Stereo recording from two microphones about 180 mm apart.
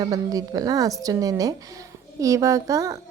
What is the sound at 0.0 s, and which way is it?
A woman's voice, 20° right (ahead or behind).